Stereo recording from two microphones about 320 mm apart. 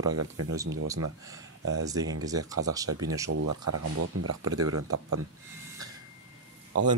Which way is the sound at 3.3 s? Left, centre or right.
Right.